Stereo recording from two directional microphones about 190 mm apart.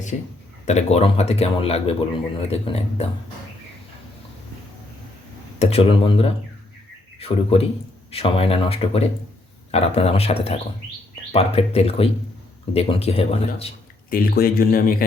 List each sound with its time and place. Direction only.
0.1 s speech: 40° left (ahead or behind)
5.5 s speech: 30° left (ahead or behind)
14.1 s speech: 50° left (ahead or behind)